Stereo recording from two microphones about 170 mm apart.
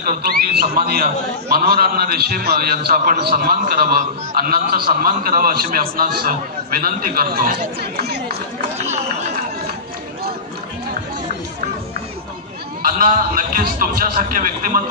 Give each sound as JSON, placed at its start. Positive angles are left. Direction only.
{"t": 0.0, "sound": "a man's voice", "side_deg": -65}
{"t": 12.9, "sound": "a man's voice", "side_deg": -55}